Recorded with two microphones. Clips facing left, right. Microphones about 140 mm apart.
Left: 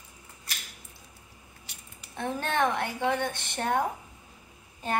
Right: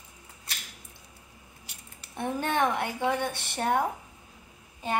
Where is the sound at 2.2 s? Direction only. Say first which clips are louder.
Right 1 dB; 10° right (ahead or behind).